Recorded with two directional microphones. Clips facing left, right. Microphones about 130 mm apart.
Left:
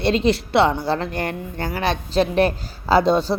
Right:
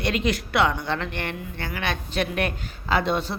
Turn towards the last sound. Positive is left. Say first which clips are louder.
# left 7 dB
turn(degrees=35)  # may be behind; listen again after turning